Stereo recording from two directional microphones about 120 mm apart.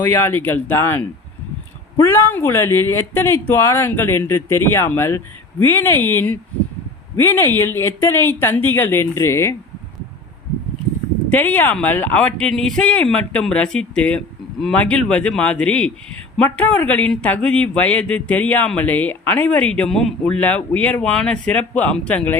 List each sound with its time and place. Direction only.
0.0 s speech: 15° left (ahead or behind)
11.3 s speech: 15° left (ahead or behind)